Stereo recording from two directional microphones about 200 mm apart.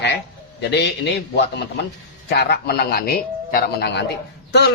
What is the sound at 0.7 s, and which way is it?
A man's voice, 60° left (ahead or behind).